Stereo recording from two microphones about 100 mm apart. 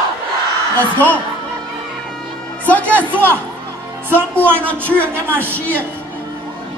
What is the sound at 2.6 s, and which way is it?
Music, 15° left (ahead or behind).